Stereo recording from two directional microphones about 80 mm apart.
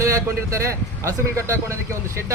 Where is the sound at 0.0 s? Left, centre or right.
Right.